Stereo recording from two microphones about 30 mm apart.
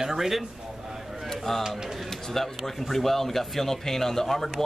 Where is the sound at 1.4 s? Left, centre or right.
Centre.